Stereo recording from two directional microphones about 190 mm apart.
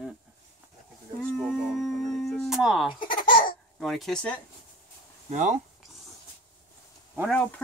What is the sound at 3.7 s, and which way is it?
Speech, centre (ahead or behind).